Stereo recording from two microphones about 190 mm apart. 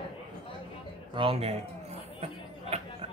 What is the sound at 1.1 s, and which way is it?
Speech, 30° right (ahead or behind).